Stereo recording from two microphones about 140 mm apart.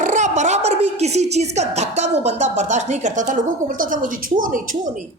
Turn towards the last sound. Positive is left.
turn(degrees=-70)  # may be behind; listen again after turning